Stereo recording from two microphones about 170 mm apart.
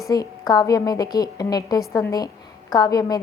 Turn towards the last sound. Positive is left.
turn(degrees=20)  # may be behind; listen again after turning